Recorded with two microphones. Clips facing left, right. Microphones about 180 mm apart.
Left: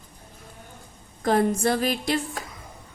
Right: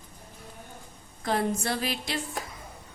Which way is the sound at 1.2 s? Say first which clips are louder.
Left 6 dB; 45° left (ahead or behind).